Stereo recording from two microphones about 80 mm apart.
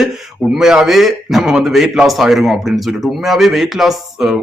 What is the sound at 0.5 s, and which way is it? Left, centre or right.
A man's voice, centre.